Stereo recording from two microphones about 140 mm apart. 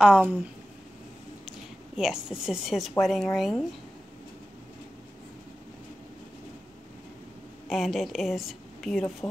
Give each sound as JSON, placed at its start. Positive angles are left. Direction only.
{"t": 0.0, "sound": "speech", "side_deg": -10}
{"t": 2.0, "sound": "a woman's voice", "side_deg": -5}
{"t": 7.7, "sound": "a woman's voice", "side_deg": 0}